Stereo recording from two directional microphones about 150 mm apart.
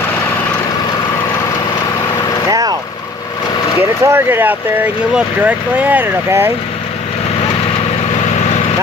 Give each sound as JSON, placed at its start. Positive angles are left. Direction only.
{"t": 4.0, "sound": "speech", "side_deg": -15}